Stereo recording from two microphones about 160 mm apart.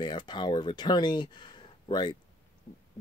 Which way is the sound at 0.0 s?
30° left (ahead or behind).